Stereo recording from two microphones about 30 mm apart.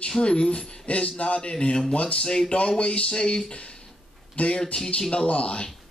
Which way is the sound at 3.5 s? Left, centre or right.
Left.